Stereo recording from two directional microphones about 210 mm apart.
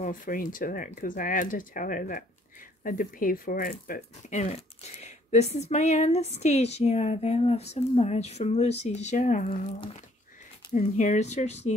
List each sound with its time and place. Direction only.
0.0 s speech: 40° left (ahead or behind)